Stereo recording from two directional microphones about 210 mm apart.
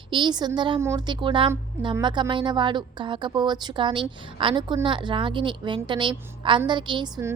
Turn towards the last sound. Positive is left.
turn(degrees=-20)  # may be behind; listen again after turning